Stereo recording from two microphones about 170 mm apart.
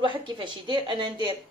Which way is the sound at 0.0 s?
30° right (ahead or behind).